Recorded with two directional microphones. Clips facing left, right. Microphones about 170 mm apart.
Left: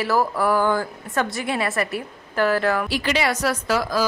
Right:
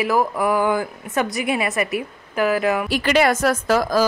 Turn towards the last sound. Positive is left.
turn(degrees=-45)  # may be behind; listen again after turning